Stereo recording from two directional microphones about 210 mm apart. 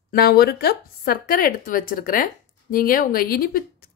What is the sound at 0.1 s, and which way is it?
Speech, 50° left (ahead or behind).